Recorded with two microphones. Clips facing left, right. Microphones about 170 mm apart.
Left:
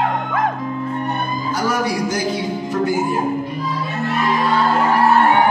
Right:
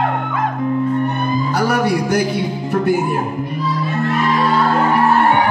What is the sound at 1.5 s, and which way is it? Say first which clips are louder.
Music: right 2 dB; 65° right (ahead or behind).